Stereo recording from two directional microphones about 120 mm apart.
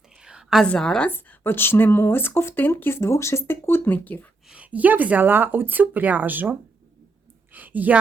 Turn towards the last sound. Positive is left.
turn(degrees=-15)  # may be behind; listen again after turning